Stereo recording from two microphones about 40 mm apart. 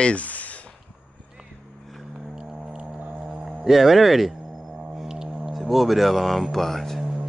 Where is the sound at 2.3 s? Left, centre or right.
Centre.